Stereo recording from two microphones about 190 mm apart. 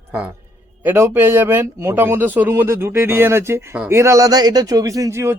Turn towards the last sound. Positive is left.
turn(degrees=-15)  # may be behind; listen again after turning